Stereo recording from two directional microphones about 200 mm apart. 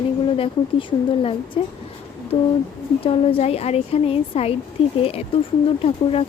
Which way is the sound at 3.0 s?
30° left (ahead or behind).